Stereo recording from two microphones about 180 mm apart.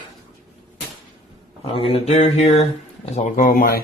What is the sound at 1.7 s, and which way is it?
Speech, 30° left (ahead or behind).